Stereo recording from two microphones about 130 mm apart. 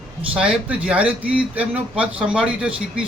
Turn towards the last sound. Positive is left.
turn(degrees=-10)  # may be behind; listen again after turning